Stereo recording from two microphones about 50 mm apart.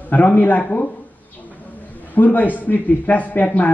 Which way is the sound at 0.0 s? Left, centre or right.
Left.